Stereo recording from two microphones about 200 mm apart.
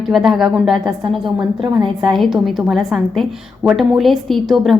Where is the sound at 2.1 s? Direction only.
Centre (ahead or behind).